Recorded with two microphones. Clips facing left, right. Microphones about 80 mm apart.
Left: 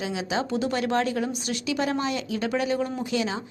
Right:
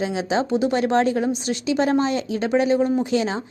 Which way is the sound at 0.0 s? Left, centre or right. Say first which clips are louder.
Right 6 dB; right.